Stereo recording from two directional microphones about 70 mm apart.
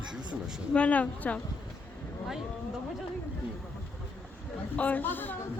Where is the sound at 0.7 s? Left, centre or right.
Centre.